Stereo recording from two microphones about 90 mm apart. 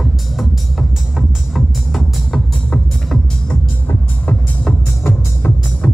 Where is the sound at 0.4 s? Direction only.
Centre (ahead or behind).